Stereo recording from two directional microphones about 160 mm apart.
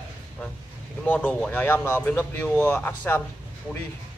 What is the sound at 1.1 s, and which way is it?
Speech, 10° left (ahead or behind).